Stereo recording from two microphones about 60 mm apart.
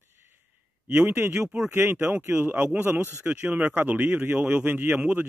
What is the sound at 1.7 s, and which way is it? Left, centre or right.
A man's voice, right.